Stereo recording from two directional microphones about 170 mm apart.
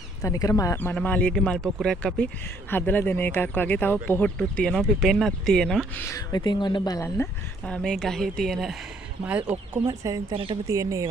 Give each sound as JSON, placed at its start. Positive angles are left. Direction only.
{"t": 0.2, "sound": "speech", "side_deg": 20}
{"t": 7.6, "sound": "speech", "side_deg": 5}
{"t": 9.8, "sound": "speech", "side_deg": -20}
{"t": 10.3, "sound": "speech", "side_deg": -30}
{"t": 10.7, "sound": "speech", "side_deg": -20}